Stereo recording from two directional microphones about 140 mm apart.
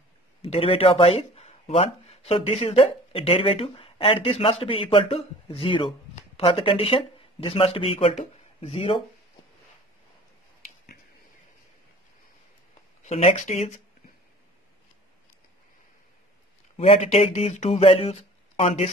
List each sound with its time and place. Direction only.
0.4 s speech: 45° left (ahead or behind)
13.0 s speech: 50° left (ahead or behind)
16.7 s speech: 50° left (ahead or behind)